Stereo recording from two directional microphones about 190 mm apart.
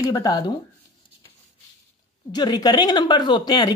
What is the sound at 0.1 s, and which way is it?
Speech, 20° left (ahead or behind).